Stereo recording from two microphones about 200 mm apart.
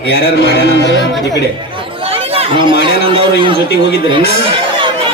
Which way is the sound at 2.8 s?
25° right (ahead or behind).